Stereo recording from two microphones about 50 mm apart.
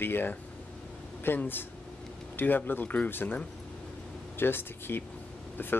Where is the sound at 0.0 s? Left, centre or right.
Left.